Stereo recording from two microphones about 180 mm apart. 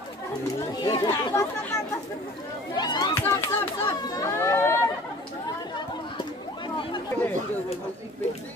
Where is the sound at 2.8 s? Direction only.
25° left (ahead or behind).